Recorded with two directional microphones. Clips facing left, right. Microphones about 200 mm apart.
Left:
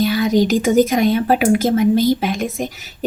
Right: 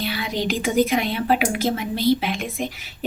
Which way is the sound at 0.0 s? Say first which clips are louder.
Left 10 dB; 45° left (ahead or behind).